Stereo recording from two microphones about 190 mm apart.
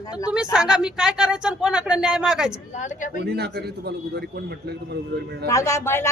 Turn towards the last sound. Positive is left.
turn(degrees=15)  # may be behind; listen again after turning